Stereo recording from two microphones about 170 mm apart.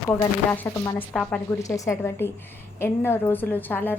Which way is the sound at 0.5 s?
10° left (ahead or behind).